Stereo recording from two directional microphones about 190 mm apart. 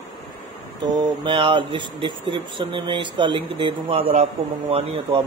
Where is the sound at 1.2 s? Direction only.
25° right (ahead or behind).